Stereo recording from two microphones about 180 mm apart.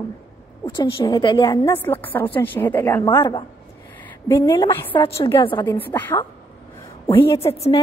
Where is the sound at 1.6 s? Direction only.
10° left (ahead or behind).